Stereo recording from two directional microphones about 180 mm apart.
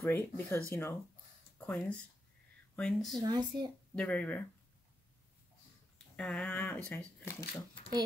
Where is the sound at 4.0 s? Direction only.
5° left (ahead or behind).